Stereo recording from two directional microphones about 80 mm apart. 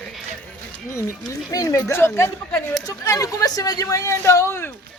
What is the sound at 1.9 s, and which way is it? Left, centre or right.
Speech, left.